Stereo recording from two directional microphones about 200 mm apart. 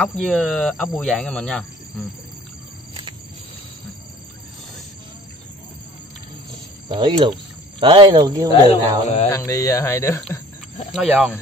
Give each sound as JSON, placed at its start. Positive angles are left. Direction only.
{"t": 0.0, "sound": "speech", "side_deg": 5}
{"t": 2.9, "sound": "a sound", "side_deg": -25}
{"t": 6.9, "sound": "speech", "side_deg": -25}
{"t": 8.6, "sound": "speech", "side_deg": 30}
{"t": 9.3, "sound": "speech", "side_deg": 15}
{"t": 10.9, "sound": "speech", "side_deg": 0}